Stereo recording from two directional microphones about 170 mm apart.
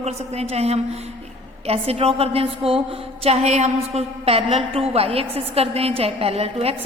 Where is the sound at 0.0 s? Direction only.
40° right (ahead or behind).